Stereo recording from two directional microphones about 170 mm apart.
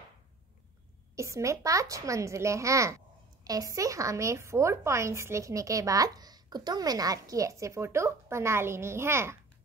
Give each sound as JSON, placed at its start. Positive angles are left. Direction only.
{"t": 1.1, "sound": "a woman's voice", "side_deg": -15}